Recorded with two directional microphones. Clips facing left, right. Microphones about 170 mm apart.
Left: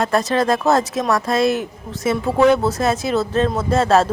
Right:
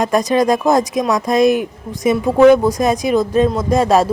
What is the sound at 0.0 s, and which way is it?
Speech, 15° right (ahead or behind).